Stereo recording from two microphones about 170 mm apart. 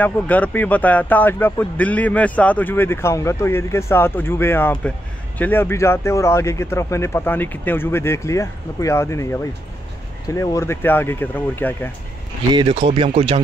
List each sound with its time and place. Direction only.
0.0 s speech: 10° left (ahead or behind)
12.5 s speech: 30° right (ahead or behind)